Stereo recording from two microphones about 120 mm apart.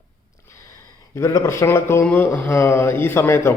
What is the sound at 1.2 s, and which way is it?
A man's voice, 25° left (ahead or behind).